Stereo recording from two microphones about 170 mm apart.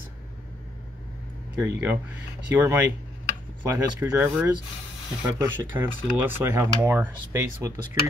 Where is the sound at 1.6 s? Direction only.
10° right (ahead or behind).